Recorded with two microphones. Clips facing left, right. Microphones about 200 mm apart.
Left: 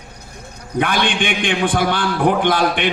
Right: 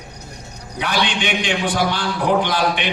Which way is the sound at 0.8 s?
55° left (ahead or behind).